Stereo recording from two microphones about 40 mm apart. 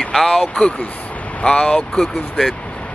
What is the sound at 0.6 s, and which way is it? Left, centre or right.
Speech, left.